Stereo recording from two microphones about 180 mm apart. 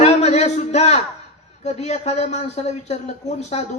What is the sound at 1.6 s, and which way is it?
A man's voice, 40° left (ahead or behind).